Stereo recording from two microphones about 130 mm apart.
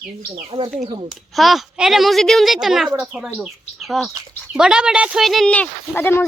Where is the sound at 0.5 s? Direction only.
50° right (ahead or behind).